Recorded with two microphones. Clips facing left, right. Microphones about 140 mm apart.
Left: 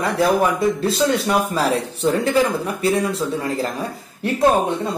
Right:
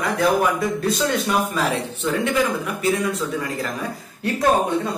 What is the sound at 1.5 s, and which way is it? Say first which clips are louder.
Speech: left 3 dB; 35° left (ahead or behind).